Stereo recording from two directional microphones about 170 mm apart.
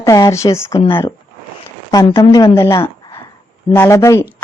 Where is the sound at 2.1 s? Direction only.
25° left (ahead or behind).